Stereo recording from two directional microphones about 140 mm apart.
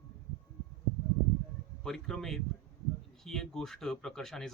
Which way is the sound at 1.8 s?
5° left (ahead or behind).